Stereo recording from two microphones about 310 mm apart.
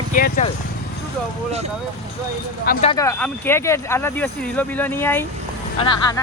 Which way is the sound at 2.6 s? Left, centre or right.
Left.